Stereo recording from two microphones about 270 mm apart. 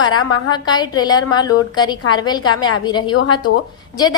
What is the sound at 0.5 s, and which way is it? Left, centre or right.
A woman's voice, centre.